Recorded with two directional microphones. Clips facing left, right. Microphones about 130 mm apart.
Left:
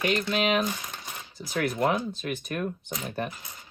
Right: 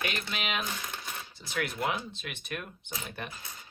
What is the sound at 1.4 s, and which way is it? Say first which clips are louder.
Speech: left 6 dB; 45° left (ahead or behind).